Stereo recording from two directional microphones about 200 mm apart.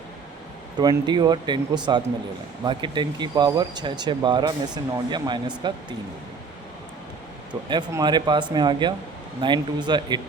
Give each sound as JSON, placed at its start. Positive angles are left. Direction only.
{"t": 0.8, "sound": "speech", "side_deg": -20}
{"t": 7.7, "sound": "speech", "side_deg": -20}